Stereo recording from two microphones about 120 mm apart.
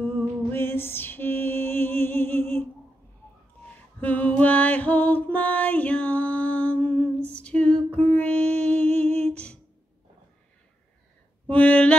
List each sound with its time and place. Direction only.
0.5 s music: 20° left (ahead or behind)
4.0 s music: 15° left (ahead or behind)
7.3 s female singing: 10° left (ahead or behind)
9.1 s humming: 10° left (ahead or behind)
11.4 s a sound: 10° left (ahead or behind)